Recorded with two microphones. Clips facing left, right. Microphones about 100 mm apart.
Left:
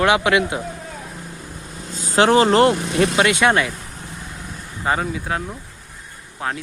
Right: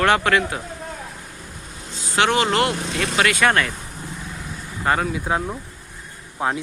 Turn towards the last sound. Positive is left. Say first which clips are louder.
# right 3 dB
turn(degrees=-15)  # may be behind; listen again after turning